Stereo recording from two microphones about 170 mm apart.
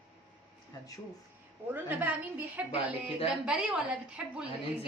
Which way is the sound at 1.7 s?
10° right (ahead or behind).